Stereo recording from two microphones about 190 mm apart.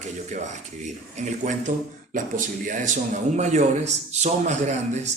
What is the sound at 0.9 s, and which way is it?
A man's voice, 40° right (ahead or behind).